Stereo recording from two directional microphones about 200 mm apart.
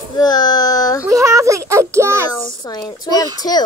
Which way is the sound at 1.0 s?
15° right (ahead or behind).